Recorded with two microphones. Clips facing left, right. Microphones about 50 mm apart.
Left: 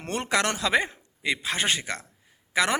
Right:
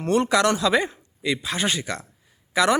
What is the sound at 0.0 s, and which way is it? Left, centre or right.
Speech, left.